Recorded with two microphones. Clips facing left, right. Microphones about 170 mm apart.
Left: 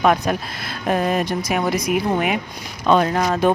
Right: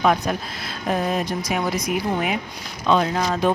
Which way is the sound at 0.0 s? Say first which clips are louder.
Left 2 dB; 60° left (ahead or behind).